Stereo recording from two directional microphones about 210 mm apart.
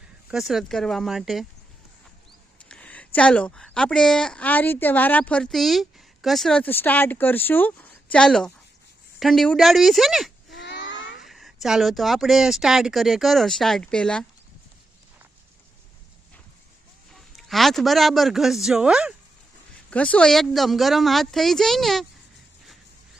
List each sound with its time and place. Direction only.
0.3 s speech: centre (ahead or behind)
2.6 s speech: 5° left (ahead or behind)
10.6 s babbling: 55° left (ahead or behind)
11.2 s speech: centre (ahead or behind)
17.2 s speech: centre (ahead or behind)
19.9 s speech: 5° left (ahead or behind)